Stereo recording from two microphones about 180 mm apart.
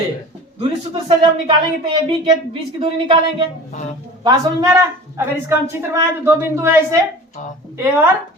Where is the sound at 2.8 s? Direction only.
30° right (ahead or behind).